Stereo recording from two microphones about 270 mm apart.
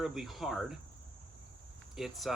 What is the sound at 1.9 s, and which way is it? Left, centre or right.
Speech, centre.